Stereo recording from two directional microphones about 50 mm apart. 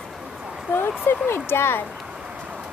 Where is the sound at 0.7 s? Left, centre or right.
Left.